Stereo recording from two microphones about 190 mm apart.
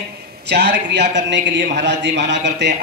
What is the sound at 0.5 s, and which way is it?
A man's voice, 60° right (ahead or behind).